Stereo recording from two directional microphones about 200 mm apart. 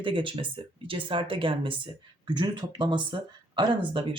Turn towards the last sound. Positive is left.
turn(degrees=-25)  # may be behind; listen again after turning